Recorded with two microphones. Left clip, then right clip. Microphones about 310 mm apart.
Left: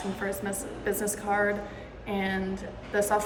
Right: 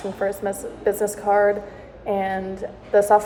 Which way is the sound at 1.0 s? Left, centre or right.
Right.